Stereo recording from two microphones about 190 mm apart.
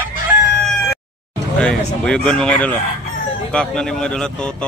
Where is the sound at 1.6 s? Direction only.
5° left (ahead or behind).